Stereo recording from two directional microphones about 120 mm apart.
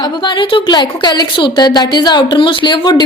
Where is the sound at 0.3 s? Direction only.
40° left (ahead or behind).